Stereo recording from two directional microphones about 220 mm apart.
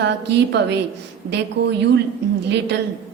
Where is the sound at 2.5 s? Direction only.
50° right (ahead or behind).